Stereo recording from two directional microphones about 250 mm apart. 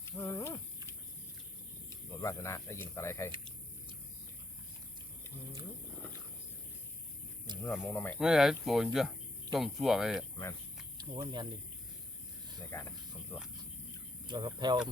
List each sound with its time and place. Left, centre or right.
0.0 s wild animals: centre
2.0 s speech: centre
7.8 s speech: centre
10.9 s speech: centre
12.7 s speech: centre
14.3 s speech: centre